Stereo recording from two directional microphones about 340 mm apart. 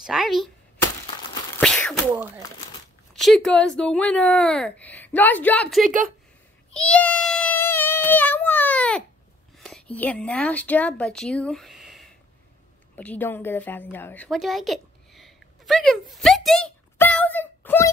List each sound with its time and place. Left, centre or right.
0.0 s speech: centre
1.6 s sneeze: centre
3.2 s speech: centre
5.9 s a woman's voice: right
6.7 s a sound: centre
9.6 s speech: centre
12.9 s a sound: centre